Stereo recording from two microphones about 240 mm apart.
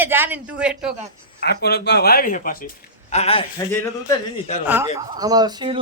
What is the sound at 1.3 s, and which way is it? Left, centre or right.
A man's voice, left.